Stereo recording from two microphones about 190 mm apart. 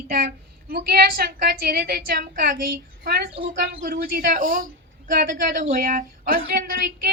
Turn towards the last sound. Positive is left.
turn(degrees=-55)  # may be behind; listen again after turning